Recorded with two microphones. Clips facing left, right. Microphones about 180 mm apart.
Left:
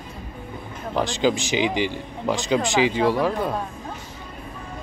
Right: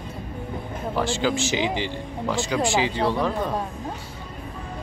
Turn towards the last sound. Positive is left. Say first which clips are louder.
# left 2 dB
turn(degrees=10)  # may be behind; listen again after turning